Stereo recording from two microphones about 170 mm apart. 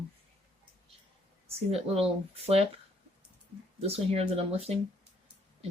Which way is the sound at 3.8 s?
35° right (ahead or behind).